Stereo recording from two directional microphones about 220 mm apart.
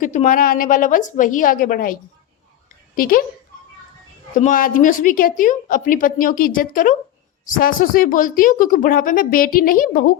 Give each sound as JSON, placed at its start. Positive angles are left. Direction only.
{"t": 0.0, "sound": "a woman's voice", "side_deg": 35}
{"t": 4.4, "sound": "a woman's voice", "side_deg": 35}